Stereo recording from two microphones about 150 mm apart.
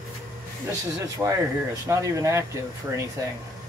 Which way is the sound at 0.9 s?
20° right (ahead or behind).